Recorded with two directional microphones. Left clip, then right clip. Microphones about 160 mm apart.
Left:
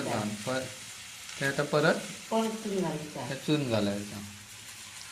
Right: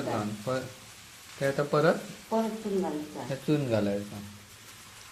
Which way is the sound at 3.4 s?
15° right (ahead or behind).